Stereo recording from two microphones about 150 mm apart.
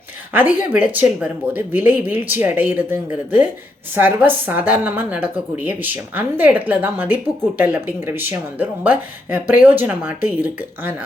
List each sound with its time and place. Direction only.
0.3 s a woman's voice: 10° right (ahead or behind)